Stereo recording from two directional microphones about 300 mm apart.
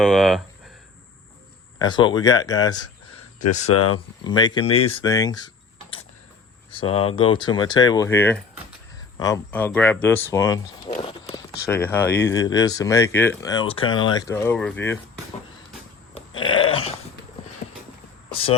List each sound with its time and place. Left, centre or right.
0.0 s speech: centre
1.8 s speech: centre
3.6 s speech: left
3.9 s speech: centre
6.7 s speech: centre
16.5 s dog: centre